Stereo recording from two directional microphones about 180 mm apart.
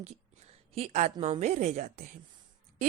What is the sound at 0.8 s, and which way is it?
A woman's voice, 40° right (ahead or behind).